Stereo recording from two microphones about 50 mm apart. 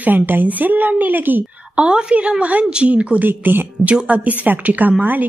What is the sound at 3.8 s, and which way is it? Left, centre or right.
A woman's voice, right.